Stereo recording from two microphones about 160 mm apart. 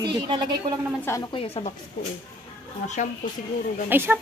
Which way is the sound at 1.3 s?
35° left (ahead or behind).